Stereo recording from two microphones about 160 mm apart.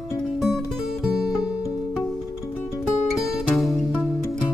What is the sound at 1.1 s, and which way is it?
Music, 5° right (ahead or behind).